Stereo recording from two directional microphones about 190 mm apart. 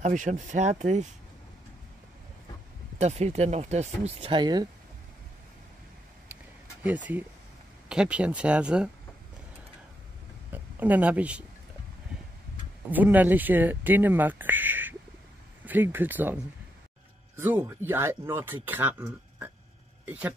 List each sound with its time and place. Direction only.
0.0 s speech: 40° right (ahead or behind)
3.0 s speech: 35° right (ahead or behind)
7.9 s speech: 5° right (ahead or behind)
10.5 s speech: 10° right (ahead or behind)
12.9 s speech: 10° right (ahead or behind)
17.4 s speech: 10° right (ahead or behind)